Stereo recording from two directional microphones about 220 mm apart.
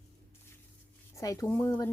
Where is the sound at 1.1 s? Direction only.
15° left (ahead or behind).